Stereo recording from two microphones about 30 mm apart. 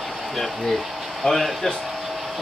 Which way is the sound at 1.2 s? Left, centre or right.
Left.